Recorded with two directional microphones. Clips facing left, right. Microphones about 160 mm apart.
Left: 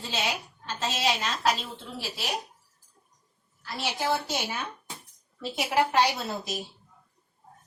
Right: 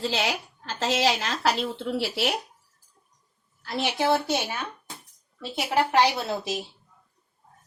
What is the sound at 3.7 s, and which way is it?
Speech, 70° right (ahead or behind).